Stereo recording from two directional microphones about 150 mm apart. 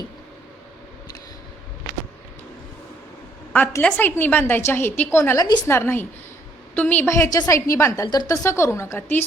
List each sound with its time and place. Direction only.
3.5 s a woman's voice: 10° left (ahead or behind)
7.1 s a woman's voice: 20° left (ahead or behind)